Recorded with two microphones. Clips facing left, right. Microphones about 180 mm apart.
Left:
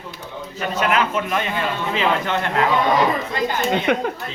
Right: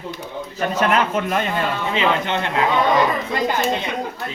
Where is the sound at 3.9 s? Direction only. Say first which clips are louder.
Left 6 dB; 70° left (ahead or behind).